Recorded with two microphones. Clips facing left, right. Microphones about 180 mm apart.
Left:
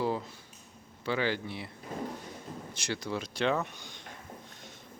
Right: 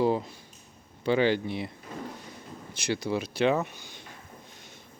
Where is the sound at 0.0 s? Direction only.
20° right (ahead or behind).